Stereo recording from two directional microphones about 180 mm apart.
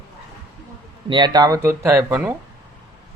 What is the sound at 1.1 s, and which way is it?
Speech, 25° right (ahead or behind).